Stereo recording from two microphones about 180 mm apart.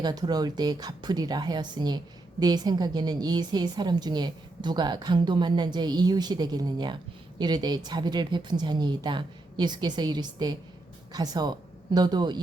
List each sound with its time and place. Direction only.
0.0 s a woman's voice: 20° right (ahead or behind)